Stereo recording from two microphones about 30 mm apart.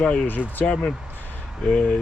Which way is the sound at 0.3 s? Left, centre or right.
Left.